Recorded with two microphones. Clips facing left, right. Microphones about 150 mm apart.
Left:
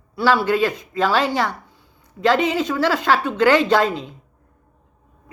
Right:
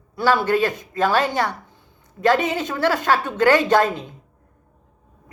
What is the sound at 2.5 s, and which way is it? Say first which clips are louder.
Speech: left 2 dB; 50° right (ahead or behind).